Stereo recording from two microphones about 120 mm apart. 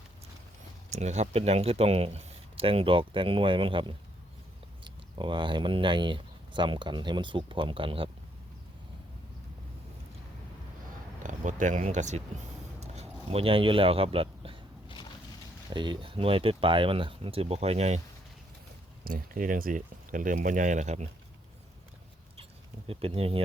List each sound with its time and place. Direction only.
0.9 s speech: 70° right (ahead or behind); by 8.1 s 50° right (ahead or behind)
11.2 s a sound: 90° right; by 14.6 s 50° right (ahead or behind)
15.7 s speech: 40° right (ahead or behind); by 18.0 s 65° right (ahead or behind)
19.7 s speech: 90° right; by 21.1 s 75° right (ahead or behind)
22.9 s speech: 55° right (ahead or behind)